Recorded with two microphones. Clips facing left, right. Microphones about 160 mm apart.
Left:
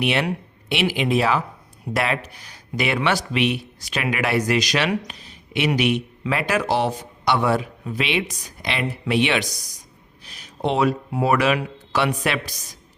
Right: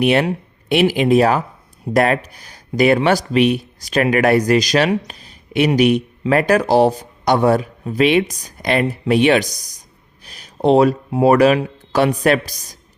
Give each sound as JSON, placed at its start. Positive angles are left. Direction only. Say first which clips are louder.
{"t": 0.0, "sound": "a man's voice", "louder": "right 7 dB", "side_deg": -45}
{"t": 10.2, "sound": "a sound", "louder": "right 9 dB", "side_deg": -40}
{"t": 11.1, "sound": "a man's voice", "louder": "right 10 dB", "side_deg": -35}